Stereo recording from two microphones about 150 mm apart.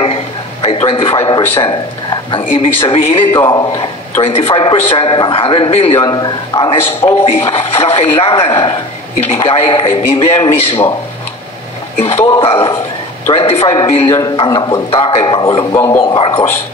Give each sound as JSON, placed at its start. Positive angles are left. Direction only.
{"t": 0.0, "sound": "a sound", "side_deg": 40}
{"t": 1.6, "sound": "speech", "side_deg": 35}
{"t": 3.3, "sound": "a man's voice", "side_deg": 25}
{"t": 4.2, "sound": "speech", "side_deg": 40}
{"t": 6.0, "sound": "a man's voice", "side_deg": 25}
{"t": 12.2, "sound": "a man's voice", "side_deg": 40}
{"t": 15.7, "sound": "speech", "side_deg": 15}
{"t": 16.0, "sound": "speech", "side_deg": 35}